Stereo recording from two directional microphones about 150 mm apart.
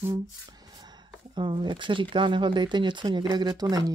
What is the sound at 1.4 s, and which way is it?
Speech, 35° right (ahead or behind).